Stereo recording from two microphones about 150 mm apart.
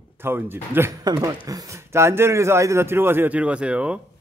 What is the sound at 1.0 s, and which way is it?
A man's voice, 25° right (ahead or behind).